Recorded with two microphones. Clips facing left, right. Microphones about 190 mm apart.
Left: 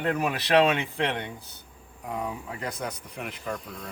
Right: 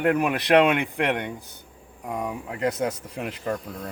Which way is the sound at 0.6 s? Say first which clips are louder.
Right 2 dB; 55° right (ahead or behind).